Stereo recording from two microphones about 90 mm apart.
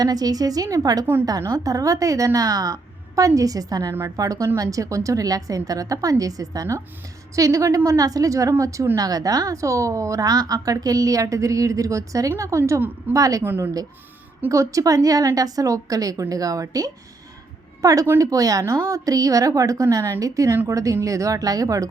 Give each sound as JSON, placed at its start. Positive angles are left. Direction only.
{"t": 0.0, "sound": "a woman's voice", "side_deg": -45}
{"t": 13.4, "sound": "speech", "side_deg": -25}
{"t": 14.5, "sound": "a woman's voice", "side_deg": -35}